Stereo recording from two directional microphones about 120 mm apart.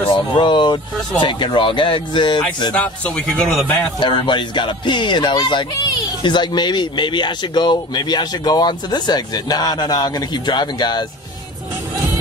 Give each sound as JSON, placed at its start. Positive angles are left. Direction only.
{"t": 0.1, "sound": "speech", "side_deg": 40}
{"t": 2.7, "sound": "a man's voice", "side_deg": 10}
{"t": 4.0, "sound": "speech", "side_deg": 40}